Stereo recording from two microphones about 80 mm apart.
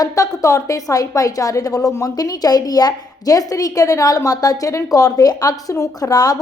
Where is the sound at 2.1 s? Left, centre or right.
Left.